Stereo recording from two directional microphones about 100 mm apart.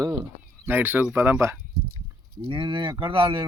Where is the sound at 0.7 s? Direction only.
20° right (ahead or behind).